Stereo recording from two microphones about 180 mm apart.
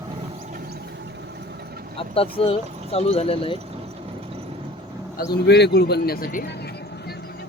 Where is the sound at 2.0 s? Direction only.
30° left (ahead or behind).